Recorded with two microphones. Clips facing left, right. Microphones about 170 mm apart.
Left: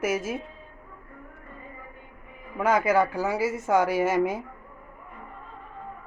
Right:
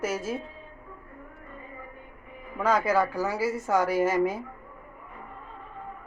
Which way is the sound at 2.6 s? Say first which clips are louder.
Left 2 dB; 20° left (ahead or behind).